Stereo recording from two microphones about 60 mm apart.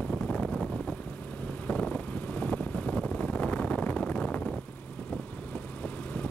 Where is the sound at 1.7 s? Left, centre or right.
Left.